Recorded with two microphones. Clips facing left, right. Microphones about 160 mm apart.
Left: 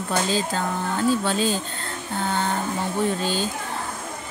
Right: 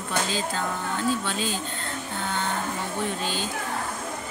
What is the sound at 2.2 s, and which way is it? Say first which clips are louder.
Music: left 5 dB; 35° left (ahead or behind).